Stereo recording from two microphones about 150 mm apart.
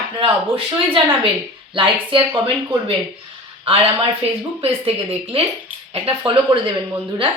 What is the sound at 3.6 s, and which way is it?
A woman's voice, 40° right (ahead or behind).